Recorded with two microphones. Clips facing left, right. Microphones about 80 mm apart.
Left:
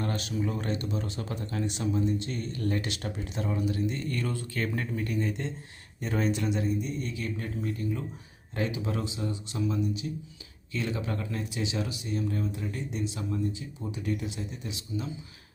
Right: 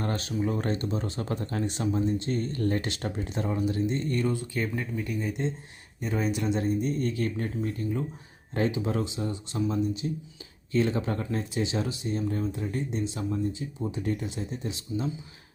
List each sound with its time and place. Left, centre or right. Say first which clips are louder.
0.0 s speech: right 2 dB; right; by 6.4 s centre
6.6 s speech: right 4 dB; right